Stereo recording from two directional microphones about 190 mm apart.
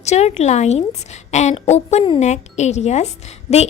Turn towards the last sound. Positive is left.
turn(degrees=35)  # may be behind; listen again after turning